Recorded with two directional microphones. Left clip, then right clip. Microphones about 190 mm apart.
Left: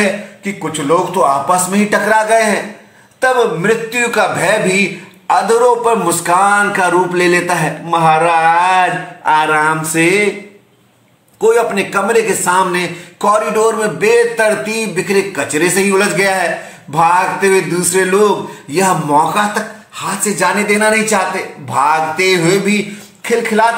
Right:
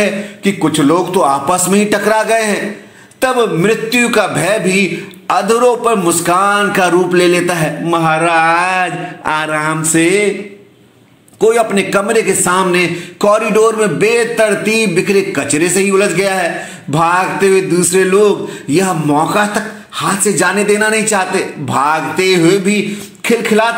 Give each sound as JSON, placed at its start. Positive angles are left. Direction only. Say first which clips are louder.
{"t": 0.0, "sound": "a man's voice", "louder": "right 1 dB", "side_deg": -20}
{"t": 11.3, "sound": "a man's voice", "louder": "right 1 dB", "side_deg": -15}